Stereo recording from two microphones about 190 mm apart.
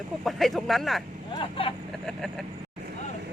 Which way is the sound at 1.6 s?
30° left (ahead or behind).